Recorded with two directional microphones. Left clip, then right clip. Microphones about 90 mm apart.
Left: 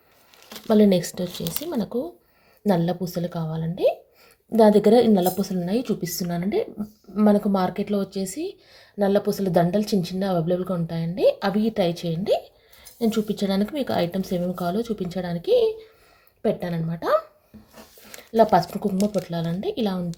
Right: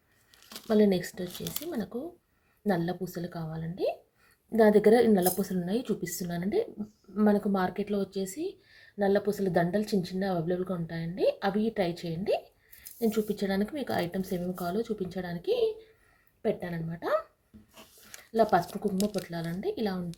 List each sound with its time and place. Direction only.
0.4 s speech: 25° left (ahead or behind)
4.5 s a woman's voice: 5° left (ahead or behind)
5.4 s speech: 20° right (ahead or behind)
5.6 s a woman's voice: 5° right (ahead or behind)
6.2 s speech: 5° left (ahead or behind)
6.5 s speech: 5° right (ahead or behind); by 17.2 s 15° left (ahead or behind)
18.2 s speech: 20° left (ahead or behind)
18.7 s a woman's voice: centre (ahead or behind)
18.9 s a woman's voice: 15° right (ahead or behind)
19.3 s speech: 15° left (ahead or behind)